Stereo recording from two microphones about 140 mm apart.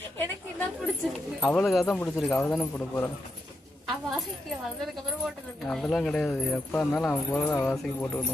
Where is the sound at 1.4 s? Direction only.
15° left (ahead or behind).